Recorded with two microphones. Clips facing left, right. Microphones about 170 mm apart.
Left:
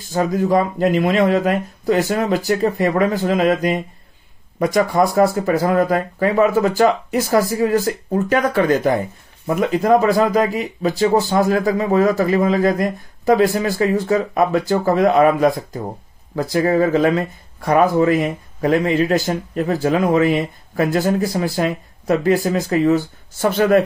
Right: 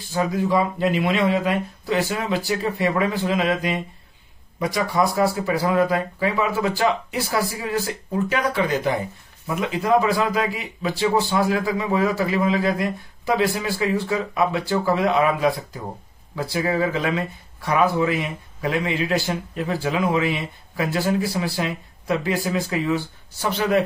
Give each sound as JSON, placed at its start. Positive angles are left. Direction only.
{"t": 0.0, "sound": "speech", "side_deg": 45}